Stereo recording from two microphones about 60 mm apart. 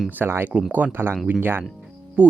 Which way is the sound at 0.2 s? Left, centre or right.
Right.